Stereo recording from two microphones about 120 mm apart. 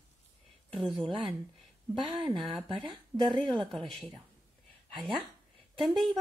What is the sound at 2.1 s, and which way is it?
Speech, 40° right (ahead or behind).